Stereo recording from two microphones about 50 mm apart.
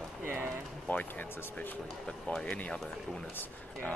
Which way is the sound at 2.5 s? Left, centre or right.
Left.